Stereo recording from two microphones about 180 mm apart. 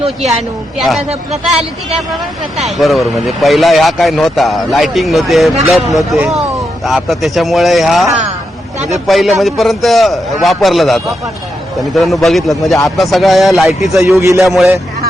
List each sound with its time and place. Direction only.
0.8 s speech: centre (ahead or behind)
2.6 s speech: centre (ahead or behind)
14.0 s a man's voice: 15° right (ahead or behind)
14.4 s speech: centre (ahead or behind)